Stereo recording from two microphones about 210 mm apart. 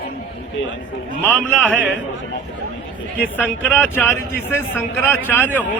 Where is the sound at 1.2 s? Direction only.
5° left (ahead or behind).